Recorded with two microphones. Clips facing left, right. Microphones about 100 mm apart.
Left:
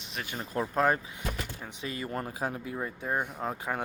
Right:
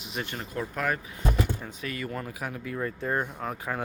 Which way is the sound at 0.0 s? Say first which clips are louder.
Right 4 dB; centre (ahead or behind).